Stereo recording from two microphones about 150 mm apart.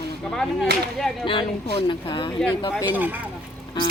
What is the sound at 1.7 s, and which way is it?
Speech, 30° left (ahead or behind).